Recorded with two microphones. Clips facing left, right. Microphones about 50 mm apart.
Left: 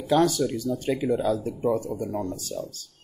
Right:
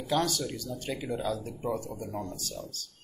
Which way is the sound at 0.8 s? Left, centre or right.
Left.